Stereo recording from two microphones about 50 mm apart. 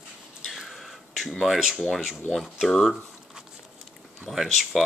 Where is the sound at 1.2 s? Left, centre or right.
Centre.